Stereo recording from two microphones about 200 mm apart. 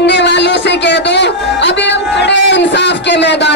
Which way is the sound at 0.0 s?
60° left (ahead or behind).